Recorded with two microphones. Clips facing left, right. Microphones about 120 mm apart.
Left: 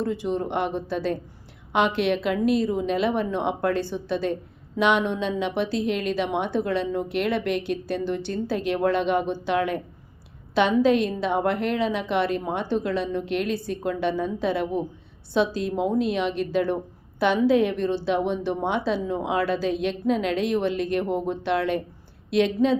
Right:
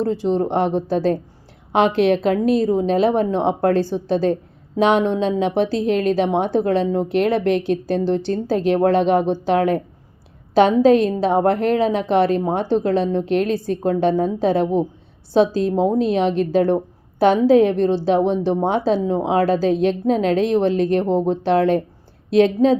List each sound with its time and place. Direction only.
0.0 s a woman's voice: 35° right (ahead or behind)